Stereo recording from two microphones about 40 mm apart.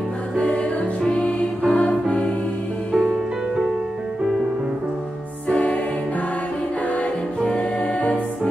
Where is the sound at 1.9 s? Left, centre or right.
Centre.